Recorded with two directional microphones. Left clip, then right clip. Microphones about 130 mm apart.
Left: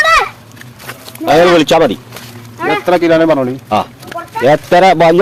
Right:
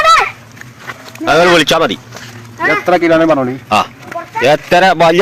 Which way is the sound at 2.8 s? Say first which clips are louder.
Left 1 dB; 60° left (ahead or behind).